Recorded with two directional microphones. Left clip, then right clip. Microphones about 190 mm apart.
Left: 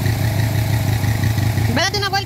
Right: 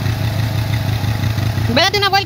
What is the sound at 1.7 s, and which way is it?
Vehicle, 35° right (ahead or behind).